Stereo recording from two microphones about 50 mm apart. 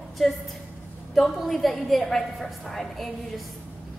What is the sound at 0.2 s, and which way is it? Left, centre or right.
A woman's voice, centre.